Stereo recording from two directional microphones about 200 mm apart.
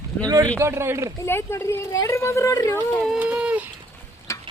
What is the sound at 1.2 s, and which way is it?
Speech, 10° left (ahead or behind).